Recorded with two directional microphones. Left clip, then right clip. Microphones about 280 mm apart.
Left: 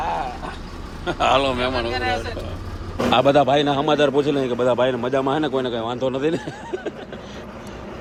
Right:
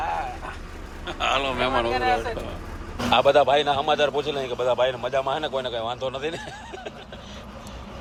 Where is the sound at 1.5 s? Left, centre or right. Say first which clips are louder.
Even; centre.